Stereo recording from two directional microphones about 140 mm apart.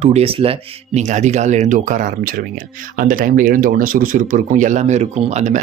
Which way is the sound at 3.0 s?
85° right.